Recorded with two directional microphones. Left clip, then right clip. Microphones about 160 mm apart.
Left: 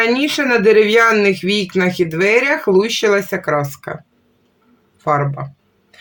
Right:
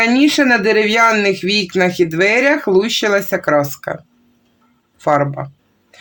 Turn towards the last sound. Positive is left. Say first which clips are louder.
# right 2 dB
turn(degrees=-30)  # may be behind; listen again after turning